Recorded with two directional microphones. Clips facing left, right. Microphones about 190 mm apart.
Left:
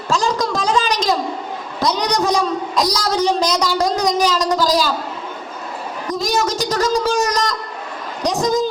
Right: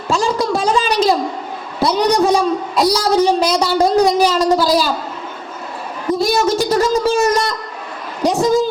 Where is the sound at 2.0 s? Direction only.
30° right (ahead or behind).